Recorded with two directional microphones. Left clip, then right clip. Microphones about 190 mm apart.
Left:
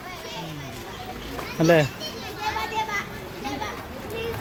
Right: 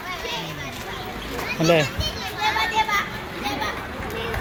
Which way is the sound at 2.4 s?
45° right (ahead or behind).